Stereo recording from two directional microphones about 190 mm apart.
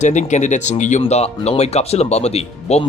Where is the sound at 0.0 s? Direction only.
40° left (ahead or behind).